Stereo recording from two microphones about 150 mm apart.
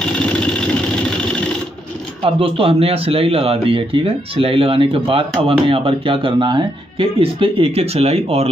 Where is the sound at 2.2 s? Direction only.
35° right (ahead or behind).